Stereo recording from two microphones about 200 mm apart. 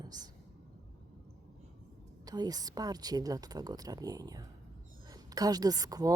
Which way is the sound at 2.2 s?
20° right (ahead or behind).